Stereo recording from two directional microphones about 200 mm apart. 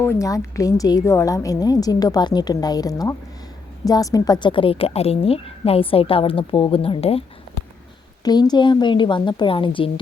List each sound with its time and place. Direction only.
0.0 s a woman's voice: 15° left (ahead or behind)